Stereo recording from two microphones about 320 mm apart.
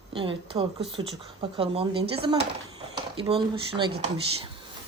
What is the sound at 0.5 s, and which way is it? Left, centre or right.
A woman's voice, centre.